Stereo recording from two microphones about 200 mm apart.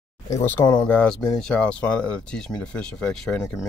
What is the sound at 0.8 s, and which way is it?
Speech, 5° left (ahead or behind).